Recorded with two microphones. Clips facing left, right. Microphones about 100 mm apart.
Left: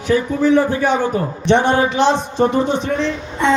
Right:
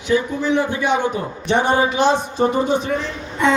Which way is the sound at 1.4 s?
10° right (ahead or behind).